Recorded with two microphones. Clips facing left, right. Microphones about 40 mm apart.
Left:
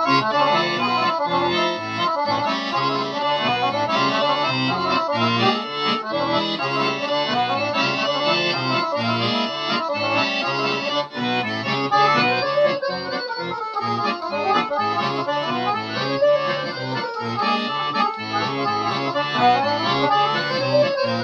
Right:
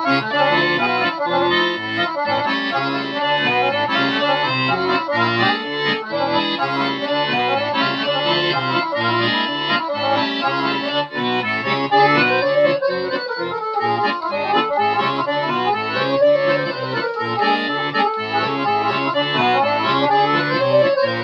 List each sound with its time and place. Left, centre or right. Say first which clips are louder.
0.0 s accordion: right 1 dB; right
3.4 s accordion: right 3 dB; right
11.9 s accordion: right 3 dB; right
16.1 s accordion: right 3 dB; right
19.3 s accordion: left 1 dB; right